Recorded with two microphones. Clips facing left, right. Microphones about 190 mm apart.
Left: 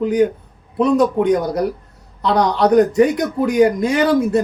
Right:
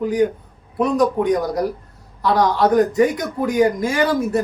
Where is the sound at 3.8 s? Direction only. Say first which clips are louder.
Left 3 dB; 20° left (ahead or behind).